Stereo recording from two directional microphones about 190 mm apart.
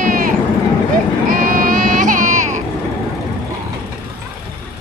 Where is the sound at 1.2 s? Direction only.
45° right (ahead or behind).